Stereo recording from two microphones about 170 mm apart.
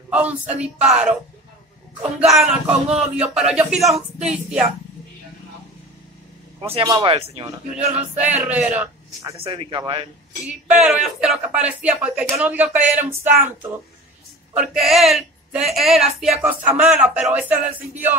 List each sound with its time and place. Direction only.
0.1 s speech: 10° right (ahead or behind)
2.1 s speech: 5° right (ahead or behind)
6.7 s speech: 25° right (ahead or behind)
7.7 s speech: 10° right (ahead or behind)
9.4 s speech: 30° right (ahead or behind)
10.8 s speech: 5° right (ahead or behind)
14.5 s speech: 5° right (ahead or behind)